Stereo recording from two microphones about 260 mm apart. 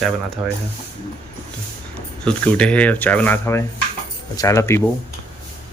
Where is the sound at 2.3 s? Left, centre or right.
Centre.